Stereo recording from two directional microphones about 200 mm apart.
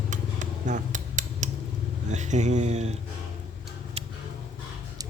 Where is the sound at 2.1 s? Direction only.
35° right (ahead or behind).